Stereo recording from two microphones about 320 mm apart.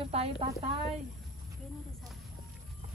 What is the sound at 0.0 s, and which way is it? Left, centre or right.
Speech, centre.